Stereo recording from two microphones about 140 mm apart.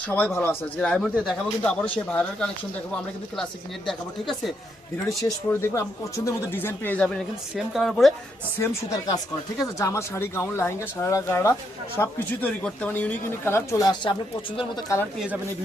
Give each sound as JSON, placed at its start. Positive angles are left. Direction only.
{"t": 0.1, "sound": "speech", "side_deg": 15}
{"t": 3.8, "sound": "speech", "side_deg": 0}
{"t": 5.5, "sound": "speech", "side_deg": 20}
{"t": 7.5, "sound": "speech", "side_deg": 0}
{"t": 8.5, "sound": "speech", "side_deg": 20}